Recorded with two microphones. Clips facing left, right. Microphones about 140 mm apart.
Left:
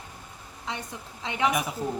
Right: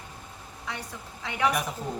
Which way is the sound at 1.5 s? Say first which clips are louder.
Left 1 dB; 5° left (ahead or behind).